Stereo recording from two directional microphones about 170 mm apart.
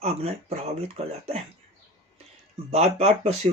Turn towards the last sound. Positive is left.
turn(degrees=-35)  # may be behind; listen again after turning